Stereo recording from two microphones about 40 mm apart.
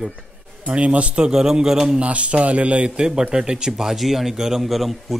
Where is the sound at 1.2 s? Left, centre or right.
Centre.